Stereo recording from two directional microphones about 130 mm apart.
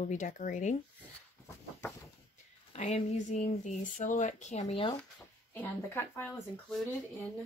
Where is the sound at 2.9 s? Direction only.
60° left (ahead or behind).